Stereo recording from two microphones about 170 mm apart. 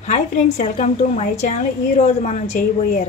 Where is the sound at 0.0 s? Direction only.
45° left (ahead or behind).